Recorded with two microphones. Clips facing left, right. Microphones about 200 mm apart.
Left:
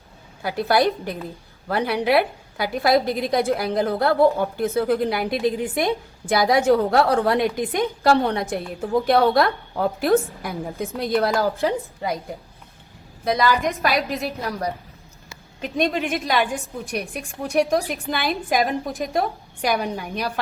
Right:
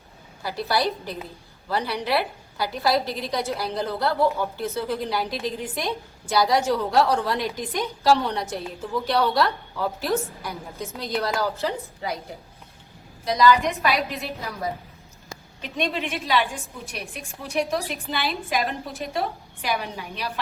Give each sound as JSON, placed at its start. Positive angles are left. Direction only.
{"t": 0.4, "sound": "a woman's voice", "side_deg": 55}
{"t": 13.2, "sound": "a woman's voice", "side_deg": 55}
{"t": 13.6, "sound": "a woman's voice", "side_deg": 0}
{"t": 15.9, "sound": "a woman's voice", "side_deg": 50}